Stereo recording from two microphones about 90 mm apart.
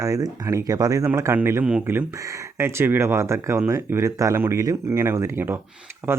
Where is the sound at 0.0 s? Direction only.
40° right (ahead or behind).